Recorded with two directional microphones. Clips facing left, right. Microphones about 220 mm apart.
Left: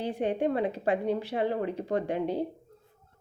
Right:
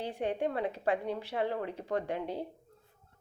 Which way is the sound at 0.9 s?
25° left (ahead or behind).